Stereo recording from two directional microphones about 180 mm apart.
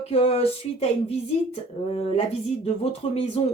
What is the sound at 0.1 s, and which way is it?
Speech, 35° left (ahead or behind).